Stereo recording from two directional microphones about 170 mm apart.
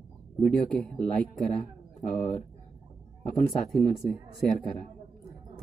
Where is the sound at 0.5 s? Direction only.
5° left (ahead or behind).